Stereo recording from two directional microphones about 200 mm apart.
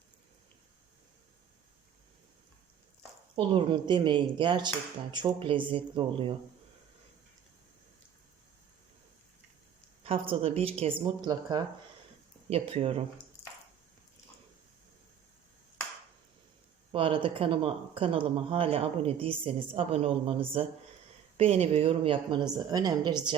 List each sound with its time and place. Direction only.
3.3 s speech: 25° right (ahead or behind)
10.0 s speech: 30° right (ahead or behind)
16.9 s speech: 25° right (ahead or behind)